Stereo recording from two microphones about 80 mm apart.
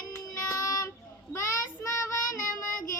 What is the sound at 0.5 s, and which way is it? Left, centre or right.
Child singing, left.